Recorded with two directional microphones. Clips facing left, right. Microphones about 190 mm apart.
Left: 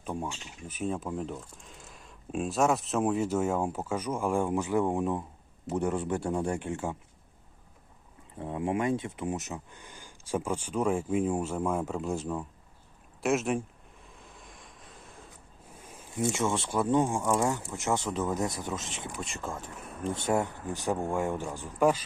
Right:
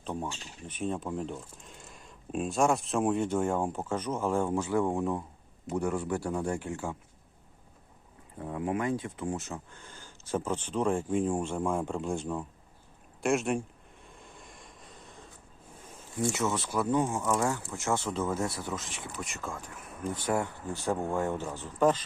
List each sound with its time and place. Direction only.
0.0 s speech: 10° left (ahead or behind)
8.4 s speech: 20° left (ahead or behind); by 12.5 s 5° left (ahead or behind)
13.2 s a sound: centre (ahead or behind)
16.1 s speech: 20° left (ahead or behind)
17.0 s speech: 10° left (ahead or behind)